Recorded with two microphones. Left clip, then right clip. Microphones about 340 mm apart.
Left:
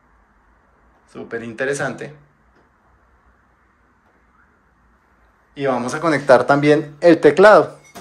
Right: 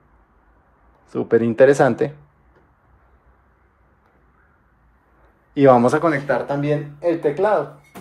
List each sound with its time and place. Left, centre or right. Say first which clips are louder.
1.1 s speech: right 11 dB; centre
5.5 s speech: right 8 dB; centre
6.0 s speech: left 7 dB; centre